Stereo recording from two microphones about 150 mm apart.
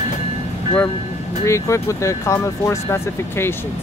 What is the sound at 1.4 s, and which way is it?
Speech, 20° left (ahead or behind).